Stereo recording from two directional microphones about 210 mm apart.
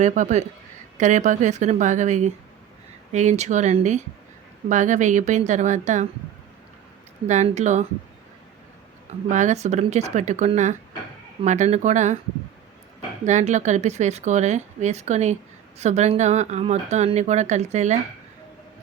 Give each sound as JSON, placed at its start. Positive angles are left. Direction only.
{"t": 0.0, "sound": "speech", "side_deg": -35}
{"t": 7.3, "sound": "speech", "side_deg": -35}
{"t": 9.0, "sound": "speech", "side_deg": -35}
{"t": 13.2, "sound": "speech", "side_deg": -35}